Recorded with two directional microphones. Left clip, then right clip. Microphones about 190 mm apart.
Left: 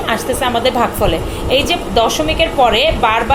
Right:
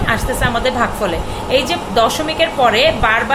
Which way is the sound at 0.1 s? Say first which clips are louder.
Left 1 dB; 15° left (ahead or behind).